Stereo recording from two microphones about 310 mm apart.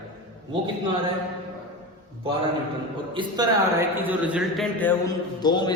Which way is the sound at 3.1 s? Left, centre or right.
Centre.